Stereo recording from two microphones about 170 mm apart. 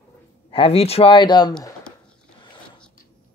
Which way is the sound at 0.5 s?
35° left (ahead or behind).